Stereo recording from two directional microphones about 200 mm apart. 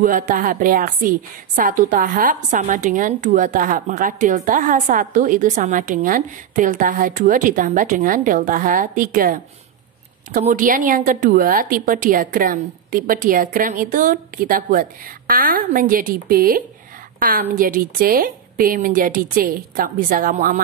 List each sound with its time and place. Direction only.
0.0 s a woman's voice: 45° right (ahead or behind)